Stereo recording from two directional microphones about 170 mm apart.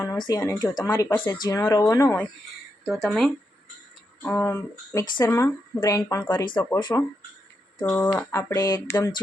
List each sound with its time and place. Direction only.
0.0 s speech: 20° left (ahead or behind)
1.0 s speech: 10° left (ahead or behind)
2.8 s speech: centre (ahead or behind)
4.2 s speech: 15° left (ahead or behind)
6.4 s speech: 25° left (ahead or behind)
7.9 s speech: 10° left (ahead or behind)